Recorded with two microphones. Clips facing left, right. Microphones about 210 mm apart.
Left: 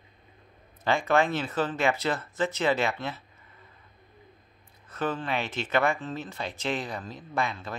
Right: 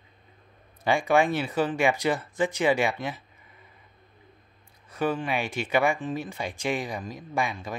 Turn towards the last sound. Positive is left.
turn(degrees=-15)  # may be behind; listen again after turning